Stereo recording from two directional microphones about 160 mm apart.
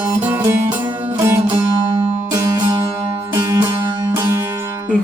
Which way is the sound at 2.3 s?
25° right (ahead or behind).